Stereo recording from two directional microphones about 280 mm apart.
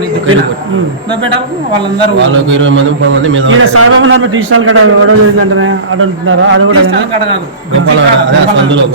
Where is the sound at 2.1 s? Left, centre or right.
Right.